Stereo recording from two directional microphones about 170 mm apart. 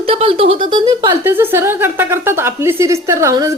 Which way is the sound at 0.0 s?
35° right (ahead or behind).